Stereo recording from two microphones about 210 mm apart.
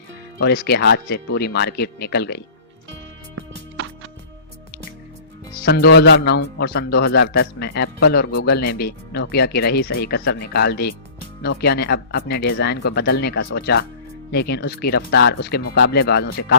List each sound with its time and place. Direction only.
0.3 s a man's voice: 50° left (ahead or behind)
3.5 s music: 60° right (ahead or behind)
5.6 s a man's voice: 45° left (ahead or behind)